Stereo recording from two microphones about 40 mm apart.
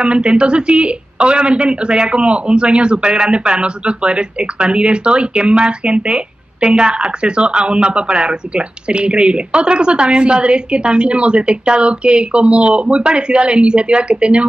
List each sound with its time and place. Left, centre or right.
0.0 s speech: right